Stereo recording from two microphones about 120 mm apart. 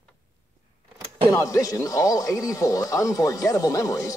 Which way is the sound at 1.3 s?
25° left (ahead or behind).